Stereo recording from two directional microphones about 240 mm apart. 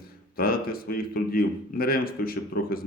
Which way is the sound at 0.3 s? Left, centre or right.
Left.